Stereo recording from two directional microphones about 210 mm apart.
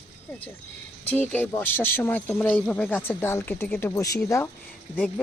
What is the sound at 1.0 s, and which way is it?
Speech, 5° left (ahead or behind).